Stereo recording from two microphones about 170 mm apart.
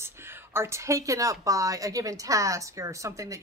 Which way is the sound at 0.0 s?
15° right (ahead or behind).